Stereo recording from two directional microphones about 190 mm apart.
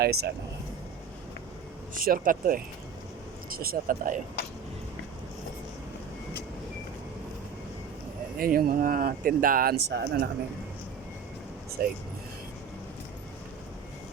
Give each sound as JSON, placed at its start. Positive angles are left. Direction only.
{"t": 0.0, "sound": "speech", "side_deg": -55}
{"t": 2.0, "sound": "speech", "side_deg": -45}
{"t": 8.4, "sound": "speech", "side_deg": -50}
{"t": 11.8, "sound": "speech", "side_deg": -50}